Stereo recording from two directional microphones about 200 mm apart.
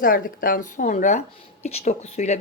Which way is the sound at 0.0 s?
45° left (ahead or behind).